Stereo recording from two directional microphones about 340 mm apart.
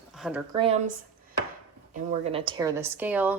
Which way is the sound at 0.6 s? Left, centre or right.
Centre.